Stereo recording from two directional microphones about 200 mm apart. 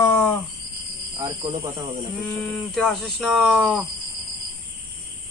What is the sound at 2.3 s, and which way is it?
Speech, centre (ahead or behind).